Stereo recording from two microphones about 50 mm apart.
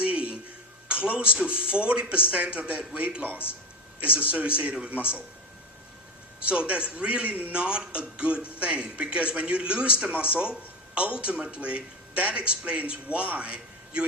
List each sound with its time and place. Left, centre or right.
0.0 s a sound: right
1.0 s speech: right
6.5 s speech: right
7.6 s a man's voice: right